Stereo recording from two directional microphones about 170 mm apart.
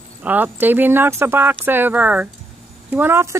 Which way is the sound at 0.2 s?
10° right (ahead or behind).